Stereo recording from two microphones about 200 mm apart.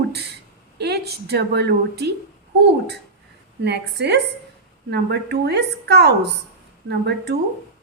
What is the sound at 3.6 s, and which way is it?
A woman's voice, 55° right (ahead or behind).